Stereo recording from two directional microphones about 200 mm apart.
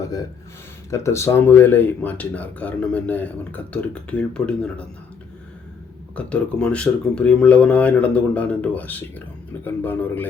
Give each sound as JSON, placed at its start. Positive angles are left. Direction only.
{"t": 0.0, "sound": "a sound", "side_deg": 20}
{"t": 0.9, "sound": "speech", "side_deg": 15}
{"t": 6.1, "sound": "speech", "side_deg": 5}